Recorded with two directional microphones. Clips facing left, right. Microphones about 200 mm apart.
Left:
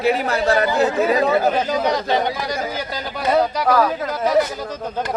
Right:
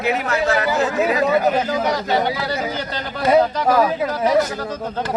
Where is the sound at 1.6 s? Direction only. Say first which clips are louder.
Left 1 dB; 20° left (ahead or behind).